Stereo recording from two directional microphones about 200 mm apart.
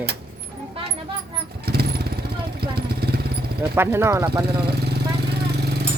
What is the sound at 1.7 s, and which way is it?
Vehicle, 50° right (ahead or behind).